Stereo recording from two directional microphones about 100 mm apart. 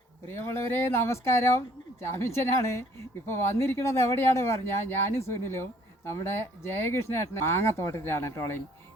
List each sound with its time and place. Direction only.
0.3 s speech: 25° left (ahead or behind)